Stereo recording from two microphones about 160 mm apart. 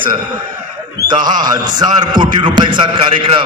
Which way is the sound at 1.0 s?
25° right (ahead or behind).